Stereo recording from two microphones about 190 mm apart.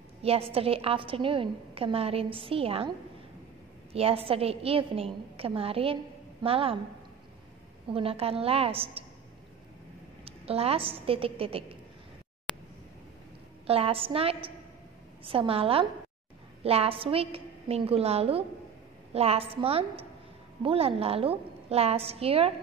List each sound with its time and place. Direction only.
0.2 s a woman's voice: 30° right (ahead or behind)
3.9 s a woman's voice: 30° right (ahead or behind)
7.9 s a woman's voice: 30° right (ahead or behind)
10.2 s a woman's voice: 30° right (ahead or behind)
13.7 s a woman's voice: 30° right (ahead or behind)